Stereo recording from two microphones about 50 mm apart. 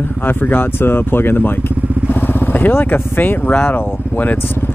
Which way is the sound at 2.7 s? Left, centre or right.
Left.